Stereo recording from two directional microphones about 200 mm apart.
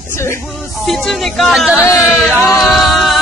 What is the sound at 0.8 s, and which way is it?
Speech, centre (ahead or behind).